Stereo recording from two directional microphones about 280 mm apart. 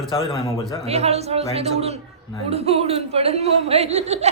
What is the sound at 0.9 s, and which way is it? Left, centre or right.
Speech, right.